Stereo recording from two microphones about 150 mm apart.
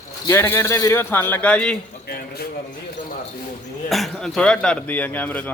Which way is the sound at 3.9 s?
Centre (ahead or behind).